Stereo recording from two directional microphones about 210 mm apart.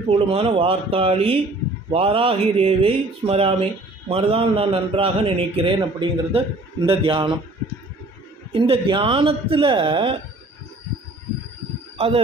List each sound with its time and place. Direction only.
0.1 s a man's voice: 30° right (ahead or behind)
8.5 s a man's voice: 25° right (ahead or behind)